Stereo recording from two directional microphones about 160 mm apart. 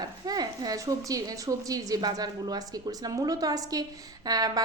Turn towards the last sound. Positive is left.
turn(degrees=-25)  # may be behind; listen again after turning